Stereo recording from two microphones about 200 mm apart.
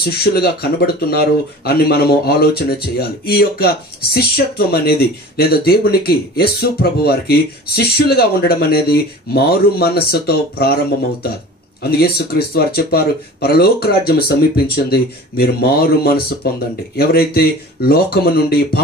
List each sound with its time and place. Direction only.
0.0 s speech: 50° left (ahead or behind)
11.8 s speech: 50° left (ahead or behind)